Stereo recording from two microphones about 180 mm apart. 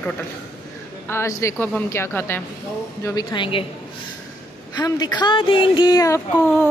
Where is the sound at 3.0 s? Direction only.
25° left (ahead or behind).